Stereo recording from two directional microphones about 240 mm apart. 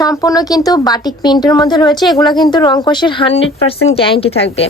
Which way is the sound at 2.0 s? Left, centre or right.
Centre.